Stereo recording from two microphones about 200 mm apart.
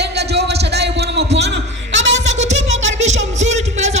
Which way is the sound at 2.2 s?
35° right (ahead or behind).